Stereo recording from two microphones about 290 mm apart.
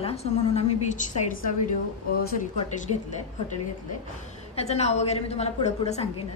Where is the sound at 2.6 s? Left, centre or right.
Left.